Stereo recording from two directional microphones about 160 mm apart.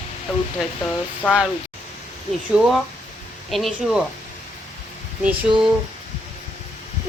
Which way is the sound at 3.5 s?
Centre (ahead or behind).